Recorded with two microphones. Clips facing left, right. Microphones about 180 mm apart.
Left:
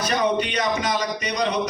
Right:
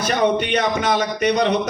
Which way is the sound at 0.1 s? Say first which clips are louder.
Right 5 dB; 60° right (ahead or behind).